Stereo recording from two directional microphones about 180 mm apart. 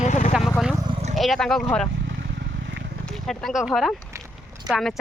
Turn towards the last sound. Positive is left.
turn(degrees=-5)  # may be behind; listen again after turning